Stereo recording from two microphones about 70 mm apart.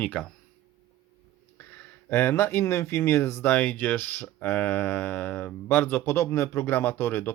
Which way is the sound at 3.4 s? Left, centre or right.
Left.